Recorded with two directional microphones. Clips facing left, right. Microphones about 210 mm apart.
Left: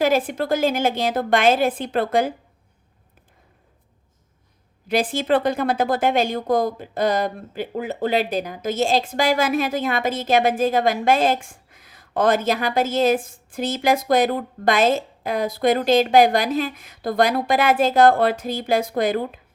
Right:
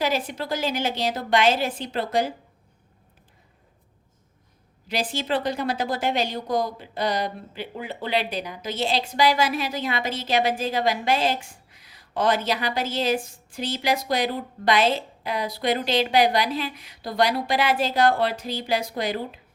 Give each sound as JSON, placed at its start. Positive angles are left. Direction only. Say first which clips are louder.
{"t": 0.0, "sound": "a woman's voice", "louder": "left 6 dB", "side_deg": 50}
{"t": 4.9, "sound": "a woman's voice", "louder": "left 7 dB", "side_deg": 55}